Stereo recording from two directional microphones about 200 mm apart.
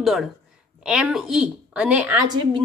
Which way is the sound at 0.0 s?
Centre (ahead or behind).